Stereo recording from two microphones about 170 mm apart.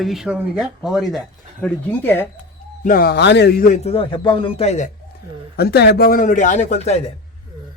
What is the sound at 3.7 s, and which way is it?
A man's voice, 35° left (ahead or behind).